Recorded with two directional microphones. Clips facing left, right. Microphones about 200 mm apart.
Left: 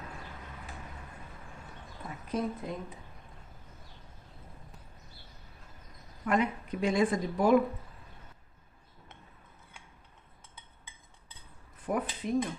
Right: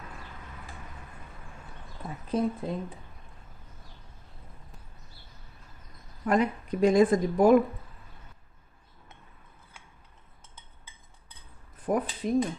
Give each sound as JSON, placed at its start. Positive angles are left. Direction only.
{"t": 2.0, "sound": "a woman's voice", "side_deg": -30}
{"t": 6.2, "sound": "speech", "side_deg": -40}
{"t": 11.8, "sound": "speech", "side_deg": -40}